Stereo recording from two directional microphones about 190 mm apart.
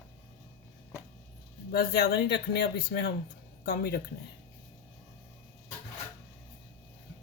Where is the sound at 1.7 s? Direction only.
55° left (ahead or behind).